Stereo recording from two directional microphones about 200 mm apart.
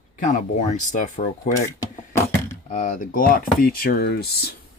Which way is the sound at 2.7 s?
35° left (ahead or behind).